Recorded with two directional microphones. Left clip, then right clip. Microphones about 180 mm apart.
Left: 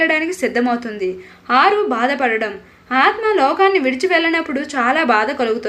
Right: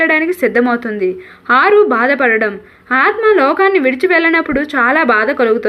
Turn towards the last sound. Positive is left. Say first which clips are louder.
# right 4 dB
turn(degrees=-25)  # may be behind; listen again after turning